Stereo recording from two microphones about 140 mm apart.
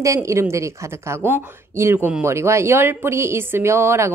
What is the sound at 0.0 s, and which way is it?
A woman's voice, 20° right (ahead or behind).